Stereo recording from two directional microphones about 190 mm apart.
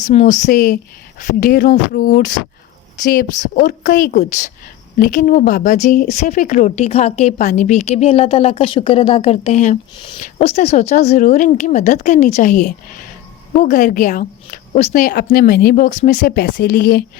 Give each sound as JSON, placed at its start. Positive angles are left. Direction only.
{"t": 0.0, "sound": "speech", "side_deg": 40}
{"t": 16.3, "sound": "speech", "side_deg": 55}